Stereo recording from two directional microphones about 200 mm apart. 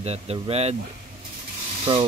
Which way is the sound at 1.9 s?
25° right (ahead or behind).